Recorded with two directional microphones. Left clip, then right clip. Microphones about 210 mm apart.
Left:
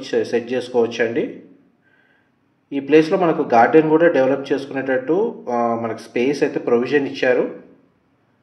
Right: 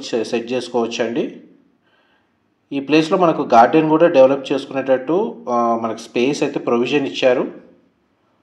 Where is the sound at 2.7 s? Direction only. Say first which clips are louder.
Left 1 dB; 30° right (ahead or behind).